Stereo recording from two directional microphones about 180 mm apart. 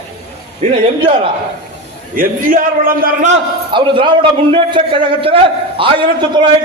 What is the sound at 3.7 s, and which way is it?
A man's voice, 25° right (ahead or behind).